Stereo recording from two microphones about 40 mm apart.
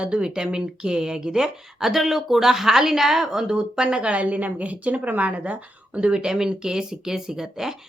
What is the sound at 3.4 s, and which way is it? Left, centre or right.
A woman's voice, right.